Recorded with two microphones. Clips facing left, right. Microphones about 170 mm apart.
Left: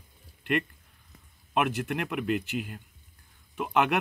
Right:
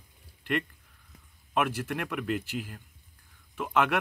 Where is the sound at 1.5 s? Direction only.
20° left (ahead or behind).